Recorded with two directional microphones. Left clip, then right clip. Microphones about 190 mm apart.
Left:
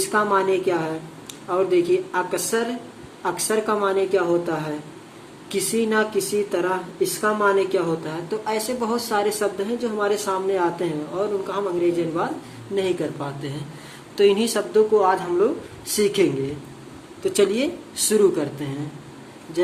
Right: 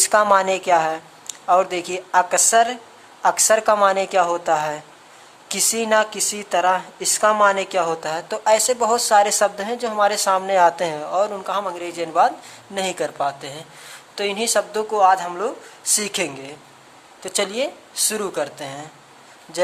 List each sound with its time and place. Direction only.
0.1 s speech: 50° right (ahead or behind)
14.2 s speech: 35° right (ahead or behind)